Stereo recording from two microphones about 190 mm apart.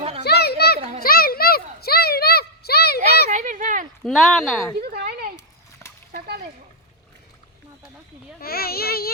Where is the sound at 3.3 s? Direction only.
40° right (ahead or behind).